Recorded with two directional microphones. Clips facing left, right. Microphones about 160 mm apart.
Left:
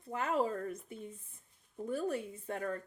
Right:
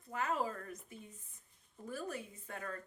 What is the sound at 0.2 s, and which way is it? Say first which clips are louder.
Speech: left 4 dB; 25° left (ahead or behind).